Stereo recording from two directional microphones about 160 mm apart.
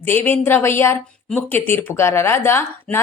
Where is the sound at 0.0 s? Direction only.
10° left (ahead or behind).